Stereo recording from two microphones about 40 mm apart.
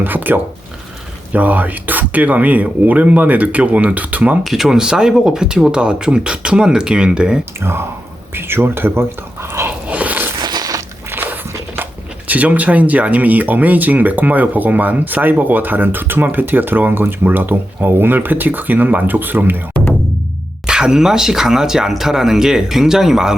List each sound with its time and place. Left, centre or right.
0.0 s speech: right
1.3 s speech: right
4.4 s speech: centre; by 7.4 s right
8.4 s speech: right
9.6 s a sound: right
11.1 s biting: right
12.3 s speech: right
20.7 s speech: centre